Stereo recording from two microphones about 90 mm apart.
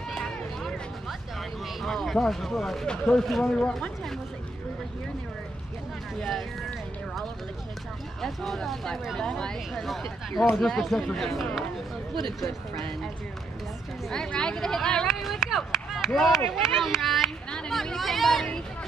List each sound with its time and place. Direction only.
0.1 s a sound: 5° left (ahead or behind)
1.8 s speech: centre (ahead or behind)
6.1 s speech: centre (ahead or behind)
8.2 s speech: 5° left (ahead or behind)
12.1 s speech: 60° right (ahead or behind)
14.0 s speech: 5° left (ahead or behind)